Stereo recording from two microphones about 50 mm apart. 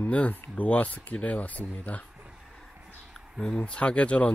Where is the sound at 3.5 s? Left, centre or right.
Left.